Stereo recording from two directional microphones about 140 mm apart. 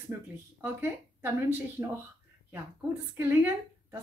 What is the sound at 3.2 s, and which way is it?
Speech, 15° right (ahead or behind).